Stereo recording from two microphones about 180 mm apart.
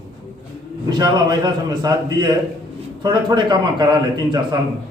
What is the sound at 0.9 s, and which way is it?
A man's voice, 25° right (ahead or behind).